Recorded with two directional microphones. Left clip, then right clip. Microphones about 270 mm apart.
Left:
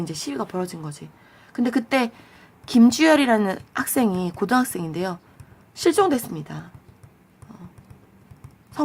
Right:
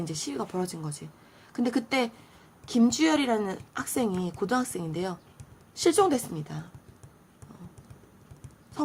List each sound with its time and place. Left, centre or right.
0.0 s a woman's voice: centre